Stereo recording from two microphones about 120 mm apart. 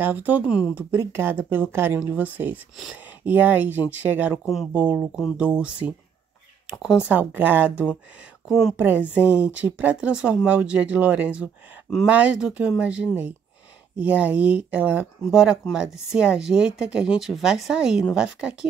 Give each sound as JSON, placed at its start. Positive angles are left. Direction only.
{"t": 0.0, "sound": "speech", "side_deg": -15}
{"t": 7.1, "sound": "speech", "side_deg": -15}
{"t": 8.5, "sound": "a woman's voice", "side_deg": 0}
{"t": 8.7, "sound": "a woman's voice", "side_deg": -15}